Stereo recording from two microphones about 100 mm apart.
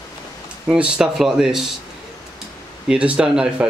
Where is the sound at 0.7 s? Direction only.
10° right (ahead or behind).